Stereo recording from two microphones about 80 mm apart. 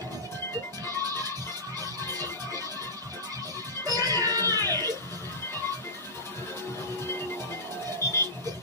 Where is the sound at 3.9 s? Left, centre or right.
Right.